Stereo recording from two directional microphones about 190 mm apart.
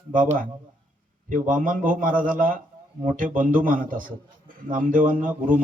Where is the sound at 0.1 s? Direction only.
45° right (ahead or behind).